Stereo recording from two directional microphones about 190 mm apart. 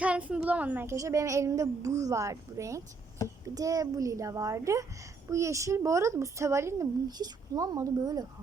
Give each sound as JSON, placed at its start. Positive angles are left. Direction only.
{"t": 0.0, "sound": "speech", "side_deg": -5}